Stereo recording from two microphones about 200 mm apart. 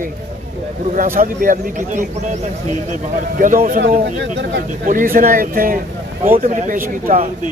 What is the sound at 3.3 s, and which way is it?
Speech, 45° right (ahead or behind).